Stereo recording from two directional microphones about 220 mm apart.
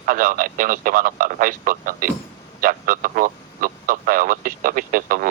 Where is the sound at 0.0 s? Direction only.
40° right (ahead or behind).